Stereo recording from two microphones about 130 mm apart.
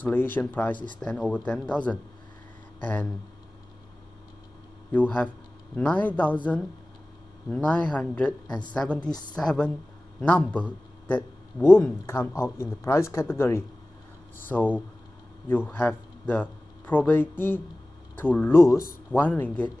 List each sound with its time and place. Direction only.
0.0 s speech: 15° left (ahead or behind)
4.9 s speech: 10° left (ahead or behind)
7.4 s a woman's voice: 10° left (ahead or behind)